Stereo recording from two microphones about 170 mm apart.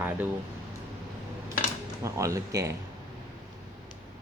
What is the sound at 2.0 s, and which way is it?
Speech, 20° right (ahead or behind).